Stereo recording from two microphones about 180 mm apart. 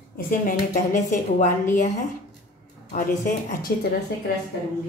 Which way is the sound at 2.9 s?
45° left (ahead or behind).